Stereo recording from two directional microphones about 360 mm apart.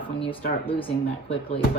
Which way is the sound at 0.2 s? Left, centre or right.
Centre.